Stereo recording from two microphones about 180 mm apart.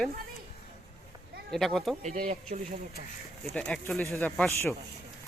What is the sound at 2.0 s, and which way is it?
Speech, 45° right (ahead or behind).